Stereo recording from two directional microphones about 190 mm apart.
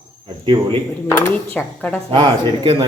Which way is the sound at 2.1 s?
25° right (ahead or behind).